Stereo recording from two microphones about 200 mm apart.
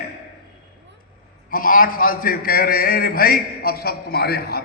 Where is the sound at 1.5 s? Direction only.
45° left (ahead or behind).